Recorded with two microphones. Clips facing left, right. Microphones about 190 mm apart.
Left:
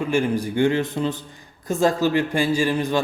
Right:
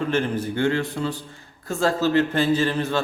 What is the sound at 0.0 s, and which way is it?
A man's voice, 10° left (ahead or behind).